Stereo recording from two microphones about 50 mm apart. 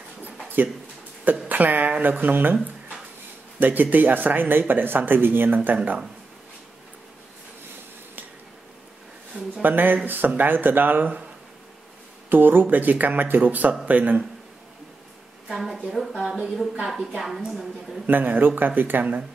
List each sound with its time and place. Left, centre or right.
0.2 s a sound: right
1.5 s speech: right
9.6 s speech: right
12.3 s speech: right
15.4 s a woman's voice: centre
16.3 s speech: centre
18.0 s speech: right